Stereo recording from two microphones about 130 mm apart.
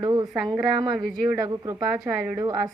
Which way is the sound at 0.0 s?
30° right (ahead or behind).